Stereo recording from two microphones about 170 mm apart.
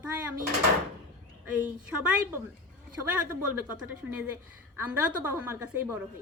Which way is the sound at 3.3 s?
10° right (ahead or behind).